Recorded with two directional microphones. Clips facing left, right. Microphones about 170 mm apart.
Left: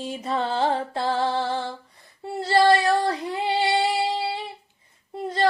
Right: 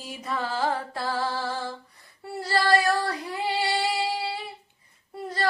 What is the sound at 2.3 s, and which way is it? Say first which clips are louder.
Child singing: left 5 dB; 25° left (ahead or behind).